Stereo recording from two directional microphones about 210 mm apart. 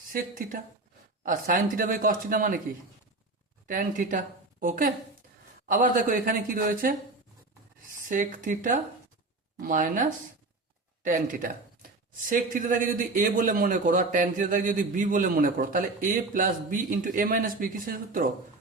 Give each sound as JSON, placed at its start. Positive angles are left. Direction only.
{"t": 0.1, "sound": "speech", "side_deg": -40}
{"t": 3.7, "sound": "speech", "side_deg": -40}
{"t": 8.0, "sound": "speech", "side_deg": -40}